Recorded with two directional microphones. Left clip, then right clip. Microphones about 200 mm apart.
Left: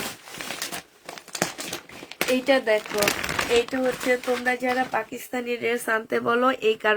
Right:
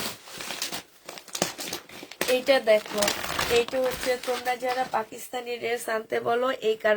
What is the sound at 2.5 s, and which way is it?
Speech, 25° left (ahead or behind).